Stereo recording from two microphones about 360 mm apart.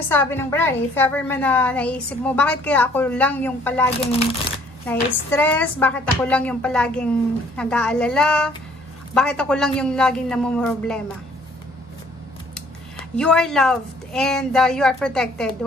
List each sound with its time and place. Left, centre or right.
0.1 s a woman's voice: centre
13.1 s a woman's voice: centre